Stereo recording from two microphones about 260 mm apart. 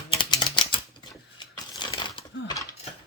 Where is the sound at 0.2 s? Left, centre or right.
Centre.